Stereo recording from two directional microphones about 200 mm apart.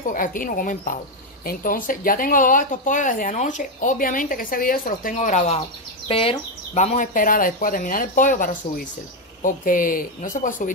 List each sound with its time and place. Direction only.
0.0 s speech: 45° left (ahead or behind)